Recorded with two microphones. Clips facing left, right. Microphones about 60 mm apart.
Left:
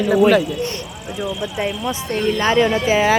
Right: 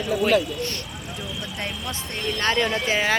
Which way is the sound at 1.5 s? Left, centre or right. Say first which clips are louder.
Left 9 dB; centre.